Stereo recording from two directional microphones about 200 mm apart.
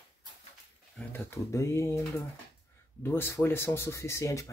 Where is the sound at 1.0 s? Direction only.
10° left (ahead or behind).